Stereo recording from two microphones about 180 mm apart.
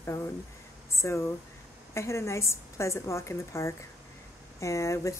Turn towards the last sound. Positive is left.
turn(degrees=15)  # may be behind; listen again after turning